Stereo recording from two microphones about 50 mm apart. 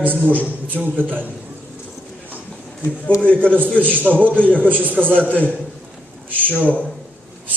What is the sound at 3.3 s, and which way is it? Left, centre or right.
A man's voice, right.